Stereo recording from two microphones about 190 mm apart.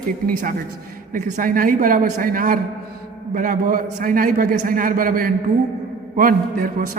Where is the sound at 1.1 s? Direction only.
45° right (ahead or behind).